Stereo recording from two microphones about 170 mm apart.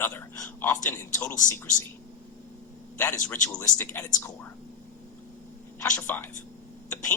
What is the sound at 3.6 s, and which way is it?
Speech, 10° left (ahead or behind).